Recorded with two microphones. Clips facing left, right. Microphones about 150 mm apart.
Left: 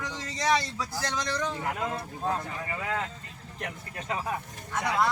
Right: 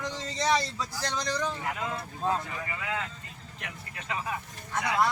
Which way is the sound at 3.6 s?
40° left (ahead or behind).